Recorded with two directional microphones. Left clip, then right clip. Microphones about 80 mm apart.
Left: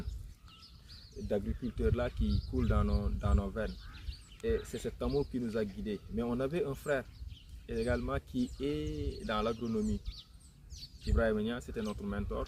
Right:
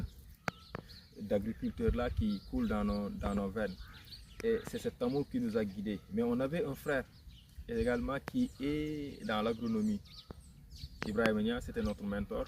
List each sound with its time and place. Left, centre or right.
0.9 s speech: left
4.1 s duck: left
4.7 s speech: left
11.1 s speech: left